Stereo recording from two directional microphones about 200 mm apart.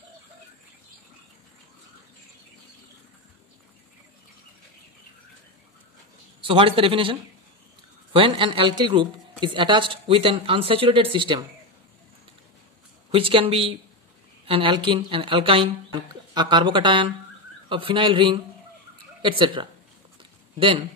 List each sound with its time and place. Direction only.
6.4 s a woman's voice: 25° right (ahead or behind)
13.1 s a woman's voice: 25° right (ahead or behind)
20.2 s a sound: 25° right (ahead or behind)